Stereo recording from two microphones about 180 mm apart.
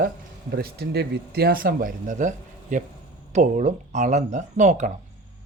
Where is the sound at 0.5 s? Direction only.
60° right (ahead or behind); by 4.9 s 40° right (ahead or behind).